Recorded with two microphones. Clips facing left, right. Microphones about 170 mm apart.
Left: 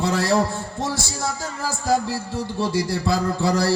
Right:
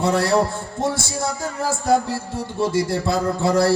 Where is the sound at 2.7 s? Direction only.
55° right (ahead or behind).